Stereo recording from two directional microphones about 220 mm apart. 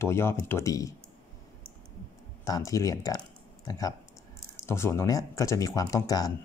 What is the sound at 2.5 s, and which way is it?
Speech, 15° left (ahead or behind).